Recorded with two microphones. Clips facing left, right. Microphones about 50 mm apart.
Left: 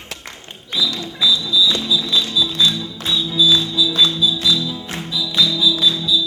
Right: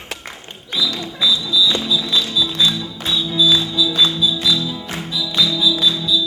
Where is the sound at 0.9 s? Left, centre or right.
Centre.